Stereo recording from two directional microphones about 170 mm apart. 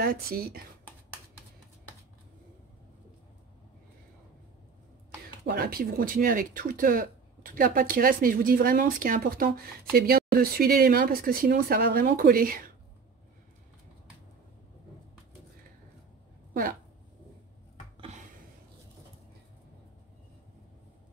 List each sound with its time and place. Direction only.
0.0 s speech: 60° right (ahead or behind)
5.4 s speech: 65° right (ahead or behind)